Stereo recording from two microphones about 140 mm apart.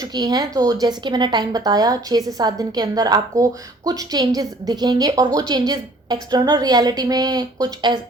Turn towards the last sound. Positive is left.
turn(degrees=-30)  # may be behind; listen again after turning